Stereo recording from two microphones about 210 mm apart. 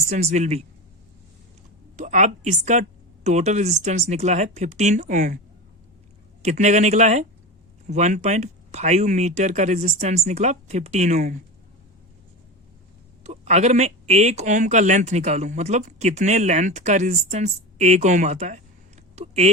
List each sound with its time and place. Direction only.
0.1 s speech: 35° right (ahead or behind)
2.0 s speech: 35° right (ahead or behind)
6.4 s speech: 35° right (ahead or behind)
13.2 s speech: 30° right (ahead or behind)
19.1 s a sound: 30° right (ahead or behind)